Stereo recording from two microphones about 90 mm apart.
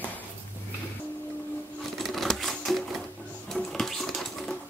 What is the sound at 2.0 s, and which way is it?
Typewriter, centre (ahead or behind).